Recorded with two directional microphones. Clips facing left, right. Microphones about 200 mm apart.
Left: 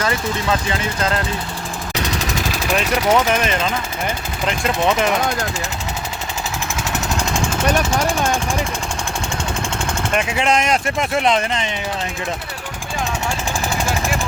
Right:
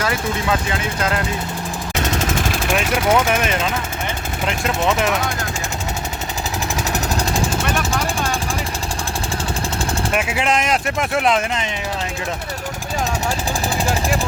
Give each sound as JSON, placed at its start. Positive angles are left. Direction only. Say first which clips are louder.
{"t": 0.7, "sound": "speech", "louder": "left 1 dB", "side_deg": -5}
{"t": 2.1, "sound": "a sound", "louder": "right 2 dB", "side_deg": -50}
{"t": 2.7, "sound": "speech", "louder": "left 1 dB", "side_deg": -5}
{"t": 10.2, "sound": "speech", "louder": "left 3 dB", "side_deg": -5}